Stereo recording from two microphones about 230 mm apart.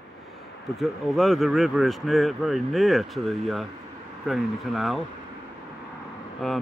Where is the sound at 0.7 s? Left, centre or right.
Centre.